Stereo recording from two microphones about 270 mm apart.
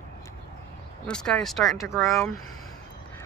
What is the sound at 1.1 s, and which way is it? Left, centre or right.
Speech, centre.